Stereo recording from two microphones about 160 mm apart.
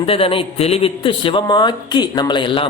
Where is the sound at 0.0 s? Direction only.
35° left (ahead or behind).